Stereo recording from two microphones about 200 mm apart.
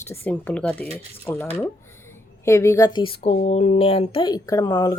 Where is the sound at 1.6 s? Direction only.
10° left (ahead or behind).